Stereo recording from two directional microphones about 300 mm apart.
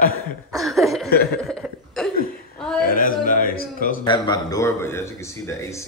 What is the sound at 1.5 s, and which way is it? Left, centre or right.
Cough, centre.